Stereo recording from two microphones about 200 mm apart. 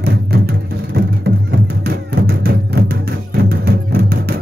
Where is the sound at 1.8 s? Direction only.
50° right (ahead or behind).